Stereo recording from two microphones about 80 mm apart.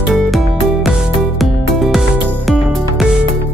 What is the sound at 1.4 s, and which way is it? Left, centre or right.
Music, centre.